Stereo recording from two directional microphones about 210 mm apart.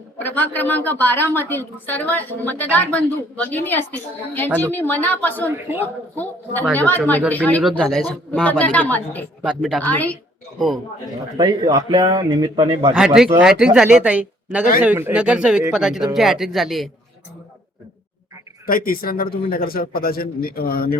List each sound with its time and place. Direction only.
0.2 s a woman's voice: 10° left (ahead or behind)
9.4 s a man's voice: 5° right (ahead or behind)
11.3 s a man's voice: 20° right (ahead or behind)
12.9 s a man's voice: 5° right (ahead or behind)
18.6 s a man's voice: 45° left (ahead or behind)